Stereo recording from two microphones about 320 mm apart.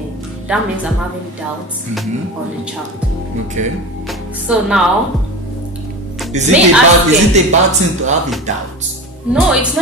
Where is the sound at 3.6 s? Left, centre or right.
Right.